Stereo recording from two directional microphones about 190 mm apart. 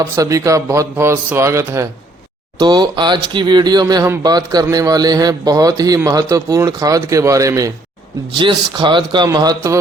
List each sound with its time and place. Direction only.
0.0 s a man's voice: 15° right (ahead or behind)